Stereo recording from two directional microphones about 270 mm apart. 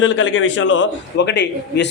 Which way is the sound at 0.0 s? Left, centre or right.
Left.